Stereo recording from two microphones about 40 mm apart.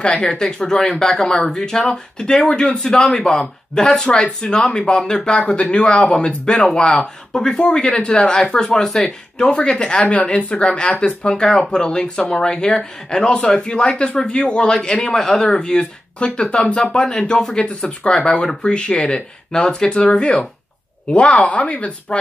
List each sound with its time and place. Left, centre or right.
0.0 s speech: left
0.3 s speech: centre
8.8 s speech: centre
9.5 s speech: left
15.6 s speech: left